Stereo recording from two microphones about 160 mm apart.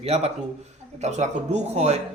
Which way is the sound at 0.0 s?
40° right (ahead or behind).